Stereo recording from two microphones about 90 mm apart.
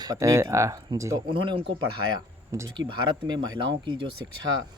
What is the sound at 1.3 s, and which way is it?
Speech, 75° right (ahead or behind).